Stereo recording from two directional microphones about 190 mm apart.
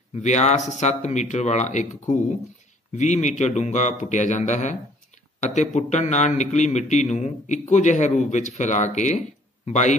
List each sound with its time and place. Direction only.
0.1 s a man's voice: 35° left (ahead or behind)